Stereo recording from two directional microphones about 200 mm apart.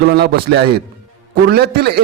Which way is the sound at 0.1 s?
55° right (ahead or behind).